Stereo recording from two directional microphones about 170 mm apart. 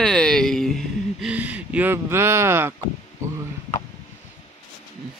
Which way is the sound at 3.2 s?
15° right (ahead or behind).